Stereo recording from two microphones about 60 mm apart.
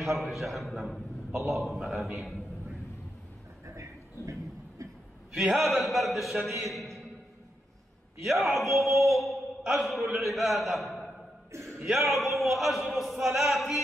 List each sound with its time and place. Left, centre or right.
0.2 s a man's voice: centre
3.6 s a sound: right
5.5 s a man's voice: centre
8.2 s a man's voice: centre
8.7 s mantra: centre
9.8 s a man's voice: centre